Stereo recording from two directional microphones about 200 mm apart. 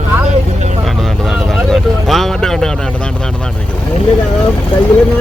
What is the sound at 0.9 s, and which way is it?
Vehicle, centre (ahead or behind).